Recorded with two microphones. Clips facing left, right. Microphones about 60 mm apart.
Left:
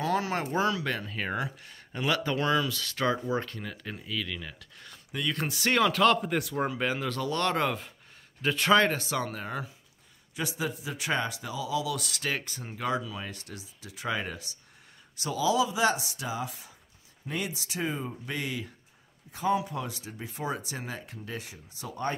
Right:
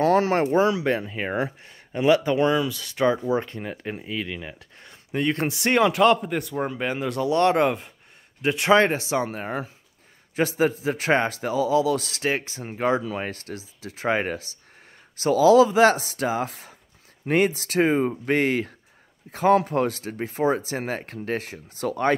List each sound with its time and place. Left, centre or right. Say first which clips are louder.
0.0 s a sound: right 9 dB; right
0.6 s speech: right 7 dB; right
6.2 s speech: right 2 dB; centre
6.8 s speech: right 4 dB; centre
9.3 s a man's voice: right 6 dB; right